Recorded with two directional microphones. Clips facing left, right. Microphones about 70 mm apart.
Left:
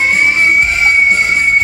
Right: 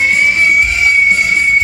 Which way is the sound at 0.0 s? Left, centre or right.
Left.